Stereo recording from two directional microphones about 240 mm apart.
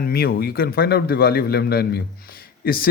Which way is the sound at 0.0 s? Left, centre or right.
Left.